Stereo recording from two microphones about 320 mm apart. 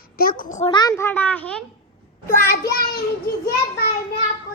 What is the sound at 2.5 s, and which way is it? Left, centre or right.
Speech, left.